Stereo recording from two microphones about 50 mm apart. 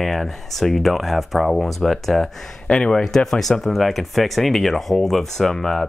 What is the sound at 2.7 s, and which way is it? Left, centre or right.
Speech, centre.